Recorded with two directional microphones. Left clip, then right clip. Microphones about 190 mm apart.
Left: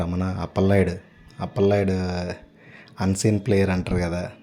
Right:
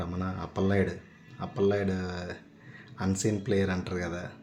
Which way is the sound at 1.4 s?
40° left (ahead or behind).